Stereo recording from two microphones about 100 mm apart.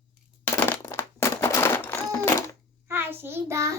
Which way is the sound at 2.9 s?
25° right (ahead or behind).